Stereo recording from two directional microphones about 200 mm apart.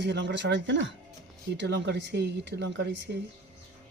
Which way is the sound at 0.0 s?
60° right (ahead or behind).